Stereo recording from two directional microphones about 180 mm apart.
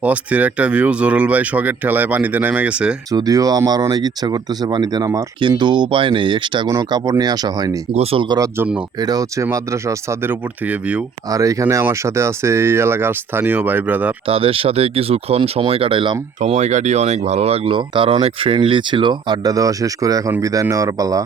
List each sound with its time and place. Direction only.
0.0 s speech: 10° right (ahead or behind)
3.1 s speech: 20° right (ahead or behind)
11.3 s speech: 20° right (ahead or behind)
14.3 s speech: 30° right (ahead or behind)
16.4 s speech: 40° right (ahead or behind); by 21.2 s 20° right (ahead or behind)